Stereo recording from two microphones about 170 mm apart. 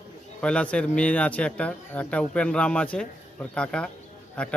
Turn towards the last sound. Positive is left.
turn(degrees=5)  # may be behind; listen again after turning